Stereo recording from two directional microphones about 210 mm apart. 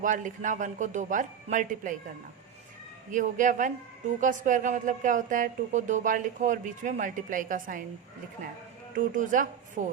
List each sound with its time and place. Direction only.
0.0 s speech: 35° right (ahead or behind)
3.1 s speech: 35° right (ahead or behind)
9.0 s a woman's voice: 40° right (ahead or behind)